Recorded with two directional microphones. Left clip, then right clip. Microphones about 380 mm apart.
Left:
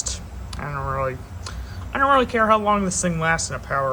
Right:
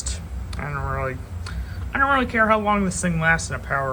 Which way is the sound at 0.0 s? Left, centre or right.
Centre.